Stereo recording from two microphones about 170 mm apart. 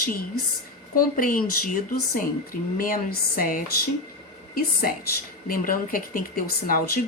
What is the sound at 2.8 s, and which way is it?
Speech, 55° left (ahead or behind).